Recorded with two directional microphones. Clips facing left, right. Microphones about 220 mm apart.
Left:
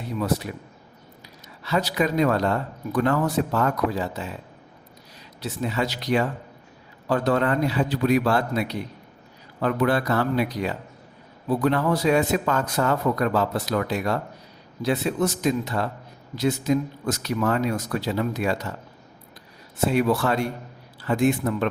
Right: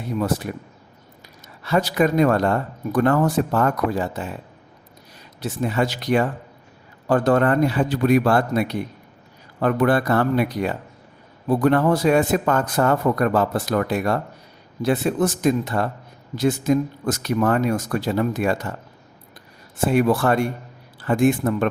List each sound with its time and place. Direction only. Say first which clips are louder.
0.2 s speech: right 2 dB; 50° right (ahead or behind)
1.6 s speech: right 4 dB; 50° right (ahead or behind)
5.4 s speech: right 4 dB; 50° right (ahead or behind)
19.8 s speech: right 3 dB; 50° right (ahead or behind)